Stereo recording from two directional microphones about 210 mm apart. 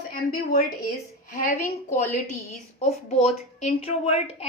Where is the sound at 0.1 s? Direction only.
45° left (ahead or behind).